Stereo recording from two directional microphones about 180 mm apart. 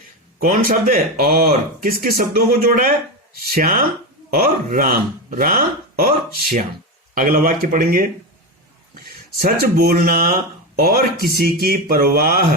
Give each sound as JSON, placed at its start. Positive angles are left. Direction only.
{"t": 0.3, "sound": "speech", "side_deg": -50}
{"t": 9.0, "sound": "speech", "side_deg": -55}